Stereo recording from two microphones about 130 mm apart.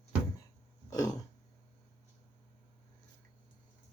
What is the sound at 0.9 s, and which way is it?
Throat clearing, 25° left (ahead or behind).